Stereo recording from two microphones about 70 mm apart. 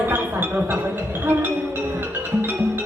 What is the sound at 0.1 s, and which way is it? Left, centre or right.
Music, right.